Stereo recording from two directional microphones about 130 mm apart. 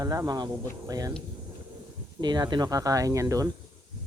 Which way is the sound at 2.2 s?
35° right (ahead or behind).